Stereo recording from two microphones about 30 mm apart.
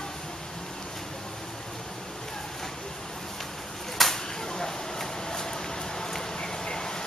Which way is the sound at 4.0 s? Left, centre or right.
Centre.